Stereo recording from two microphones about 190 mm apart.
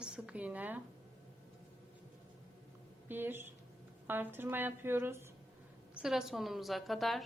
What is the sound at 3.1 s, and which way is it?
A woman's voice, 10° right (ahead or behind).